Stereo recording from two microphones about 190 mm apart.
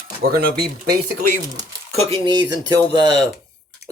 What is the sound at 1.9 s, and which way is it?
Speech, 30° right (ahead or behind).